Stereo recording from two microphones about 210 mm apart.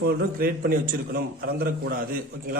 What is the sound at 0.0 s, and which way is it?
A man's voice, 45° right (ahead or behind).